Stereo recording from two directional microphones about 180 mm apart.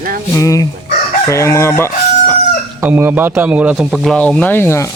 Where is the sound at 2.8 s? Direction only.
10° right (ahead or behind).